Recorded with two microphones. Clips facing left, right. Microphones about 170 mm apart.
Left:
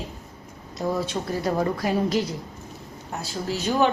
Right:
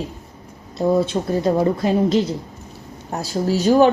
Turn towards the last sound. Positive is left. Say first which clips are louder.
# right 8 dB
turn(degrees=-40)  # may be behind; listen again after turning